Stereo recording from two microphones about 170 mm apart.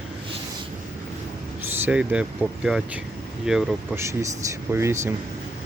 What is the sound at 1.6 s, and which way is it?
Speech, 10° right (ahead or behind).